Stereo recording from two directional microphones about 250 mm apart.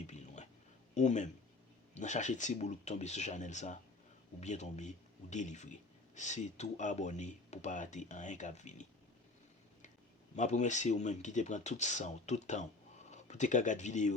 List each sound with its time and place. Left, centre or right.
0.9 s speech: left
10.3 s speech: left